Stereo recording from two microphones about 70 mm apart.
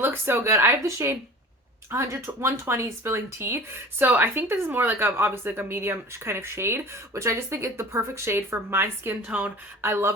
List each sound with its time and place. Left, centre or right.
0.0 s speech: right
9.2 s a woman's voice: right
9.8 s speech: right